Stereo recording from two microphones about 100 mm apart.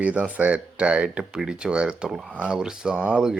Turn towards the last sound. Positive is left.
turn(degrees=-10)  # may be behind; listen again after turning